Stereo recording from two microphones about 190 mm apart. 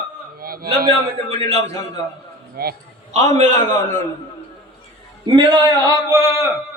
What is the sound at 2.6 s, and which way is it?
Speech, 55° right (ahead or behind).